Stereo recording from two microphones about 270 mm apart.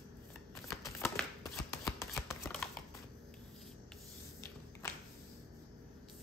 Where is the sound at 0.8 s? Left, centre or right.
Centre.